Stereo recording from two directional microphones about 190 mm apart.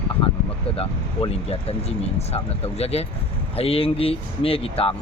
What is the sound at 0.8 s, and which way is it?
Speech, 30° left (ahead or behind).